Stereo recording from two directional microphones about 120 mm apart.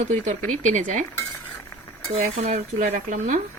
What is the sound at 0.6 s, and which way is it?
Dishes, 90° right.